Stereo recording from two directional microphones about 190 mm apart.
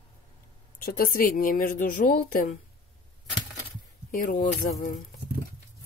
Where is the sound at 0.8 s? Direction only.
50° left (ahead or behind).